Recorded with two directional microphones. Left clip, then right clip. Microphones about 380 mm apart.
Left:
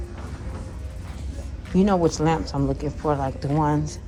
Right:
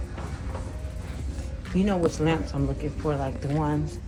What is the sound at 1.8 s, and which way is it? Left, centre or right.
Speech, centre.